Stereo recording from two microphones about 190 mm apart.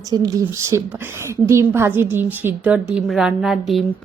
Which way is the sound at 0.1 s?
20° right (ahead or behind).